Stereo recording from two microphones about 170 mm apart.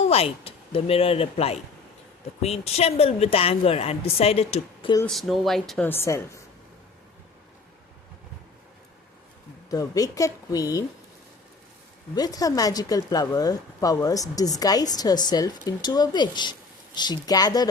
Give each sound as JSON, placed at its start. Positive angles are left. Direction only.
{"t": 0.1, "sound": "a woman's voice", "side_deg": 35}
{"t": 5.0, "sound": "speech", "side_deg": 0}
{"t": 9.6, "sound": "speech", "side_deg": 20}
{"t": 12.1, "sound": "speech", "side_deg": 20}